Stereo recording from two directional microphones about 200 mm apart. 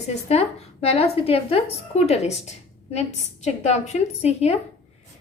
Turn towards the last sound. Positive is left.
turn(degrees=30)  # may be behind; listen again after turning